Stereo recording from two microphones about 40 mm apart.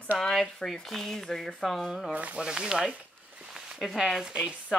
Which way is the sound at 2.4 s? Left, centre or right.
Centre.